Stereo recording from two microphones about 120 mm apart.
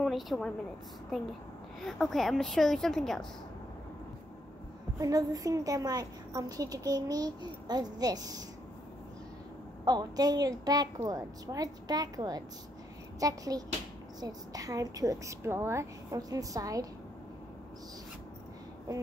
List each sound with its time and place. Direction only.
0.0 s a woman's voice: centre (ahead or behind)
4.9 s a woman's voice: 30° right (ahead or behind)
9.8 s a woman's voice: 35° right (ahead or behind)
18.9 s a woman's voice: 30° right (ahead or behind)